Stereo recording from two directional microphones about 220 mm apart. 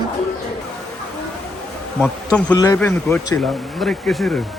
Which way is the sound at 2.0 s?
5° left (ahead or behind).